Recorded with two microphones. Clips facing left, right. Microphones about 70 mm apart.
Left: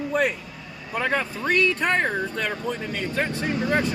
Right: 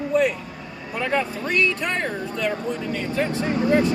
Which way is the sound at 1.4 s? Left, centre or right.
Left.